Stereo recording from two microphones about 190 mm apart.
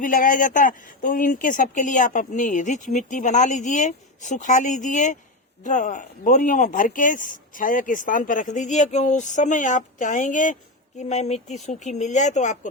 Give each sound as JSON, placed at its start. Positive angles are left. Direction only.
{"t": 0.0, "sound": "a man's voice", "side_deg": 45}